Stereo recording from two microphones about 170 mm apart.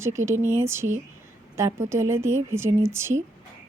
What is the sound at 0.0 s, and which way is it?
A woman's voice, 15° right (ahead or behind).